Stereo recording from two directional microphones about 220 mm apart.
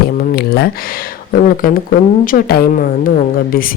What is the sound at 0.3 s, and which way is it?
Speech, 45° left (ahead or behind).